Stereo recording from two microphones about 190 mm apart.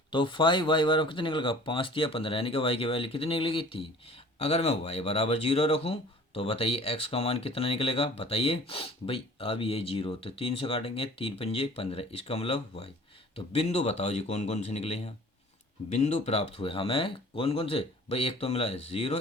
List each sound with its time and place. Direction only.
0.1 s speech: 25° left (ahead or behind)